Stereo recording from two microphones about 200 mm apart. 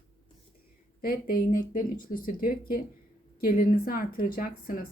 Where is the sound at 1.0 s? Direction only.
45° left (ahead or behind).